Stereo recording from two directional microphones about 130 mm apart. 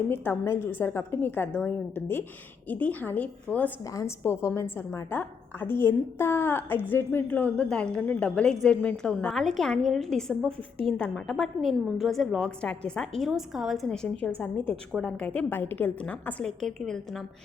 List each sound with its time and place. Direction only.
0.1 s a woman's voice: 20° left (ahead or behind)